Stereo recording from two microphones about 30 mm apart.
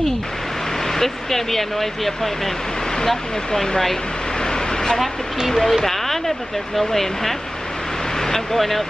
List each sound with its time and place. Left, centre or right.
0.9 s speech: centre
4.5 s vehicle: centre
5.7 s a sound: centre
6.8 s speech: centre
8.5 s speech: centre